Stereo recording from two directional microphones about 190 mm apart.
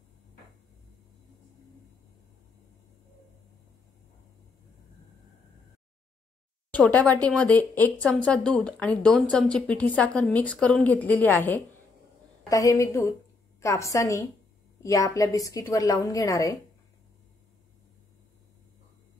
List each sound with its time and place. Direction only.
6.7 s speech: 5° left (ahead or behind)